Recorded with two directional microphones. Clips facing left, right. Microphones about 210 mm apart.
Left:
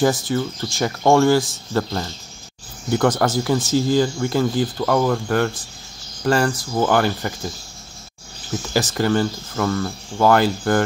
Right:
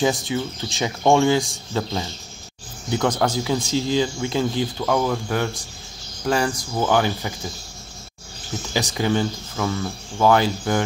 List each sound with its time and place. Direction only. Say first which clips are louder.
0.3 s speech: left 3 dB; 15° right (ahead or behind)
3.0 s speech: left 3 dB; 5° left (ahead or behind)
3.7 s speech: left 4 dB; 50° left (ahead or behind)
4.0 s speech: left 3 dB; 15° right (ahead or behind)
4.7 s speech: left 3 dB; centre (ahead or behind)
6.5 s speech: left 2 dB; 5° left (ahead or behind)
8.7 s speech: left 3 dB; centre (ahead or behind)
10.1 s speech: left 2 dB; 5° left (ahead or behind)